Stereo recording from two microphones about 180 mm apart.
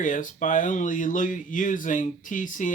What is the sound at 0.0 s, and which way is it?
Speech, 45° left (ahead or behind).